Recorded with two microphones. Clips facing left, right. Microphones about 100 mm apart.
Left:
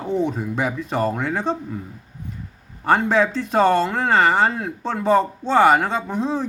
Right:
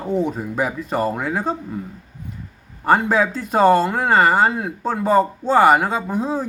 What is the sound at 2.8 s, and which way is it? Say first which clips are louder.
Speech: right 1 dB; 5° right (ahead or behind).